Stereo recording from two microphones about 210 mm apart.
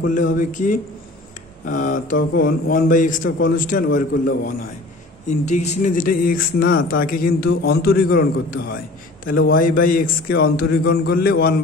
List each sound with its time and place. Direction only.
0.0 s a man's voice: 40° left (ahead or behind)
5.4 s speech: 35° left (ahead or behind)